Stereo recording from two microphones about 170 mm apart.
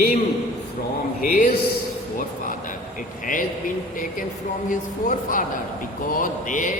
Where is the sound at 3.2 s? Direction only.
50° left (ahead or behind).